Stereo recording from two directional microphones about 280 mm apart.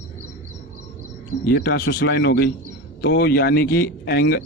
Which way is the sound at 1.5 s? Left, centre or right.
Left.